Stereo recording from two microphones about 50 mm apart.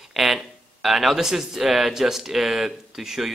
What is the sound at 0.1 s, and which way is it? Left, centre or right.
Speech, centre.